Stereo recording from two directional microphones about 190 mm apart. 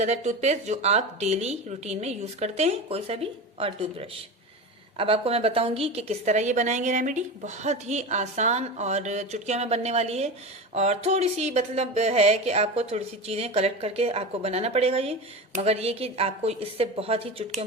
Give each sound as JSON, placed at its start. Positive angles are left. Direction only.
{"t": 0.0, "sound": "a woman's voice", "side_deg": -35}